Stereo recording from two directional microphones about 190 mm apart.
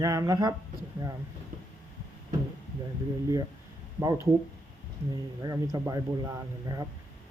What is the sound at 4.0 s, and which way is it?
Speech, 15° right (ahead or behind).